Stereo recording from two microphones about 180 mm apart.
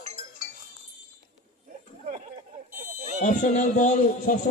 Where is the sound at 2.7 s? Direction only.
40° right (ahead or behind).